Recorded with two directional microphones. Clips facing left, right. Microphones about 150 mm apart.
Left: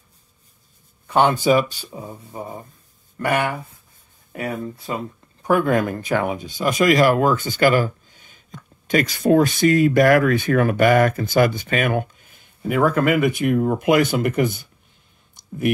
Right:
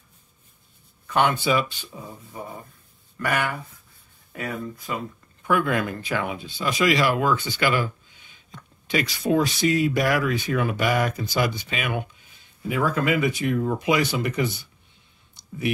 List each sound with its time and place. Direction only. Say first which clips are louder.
1.0 s speech: left 5 dB; 30° left (ahead or behind); by 14.7 s 50° left (ahead or behind)